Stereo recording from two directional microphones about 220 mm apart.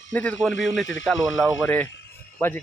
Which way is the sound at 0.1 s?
5° left (ahead or behind).